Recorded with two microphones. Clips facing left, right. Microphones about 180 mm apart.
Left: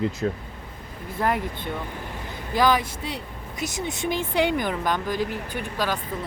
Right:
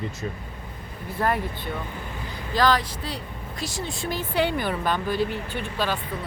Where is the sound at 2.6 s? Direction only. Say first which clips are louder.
Left 1 dB; 20° left (ahead or behind).